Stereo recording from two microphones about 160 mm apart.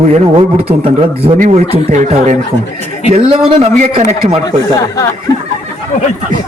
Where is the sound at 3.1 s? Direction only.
35° right (ahead or behind).